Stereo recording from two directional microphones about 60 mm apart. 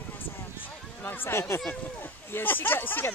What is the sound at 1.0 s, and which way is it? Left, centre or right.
Speech, left.